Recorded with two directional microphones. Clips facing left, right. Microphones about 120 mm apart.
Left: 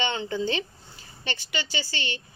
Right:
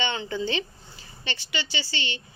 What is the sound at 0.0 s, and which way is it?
A woman's voice, 35° left (ahead or behind).